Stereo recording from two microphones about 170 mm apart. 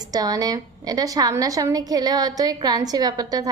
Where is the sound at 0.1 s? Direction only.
20° right (ahead or behind).